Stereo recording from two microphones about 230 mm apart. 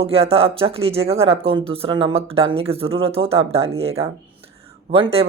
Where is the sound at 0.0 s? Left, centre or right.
Right.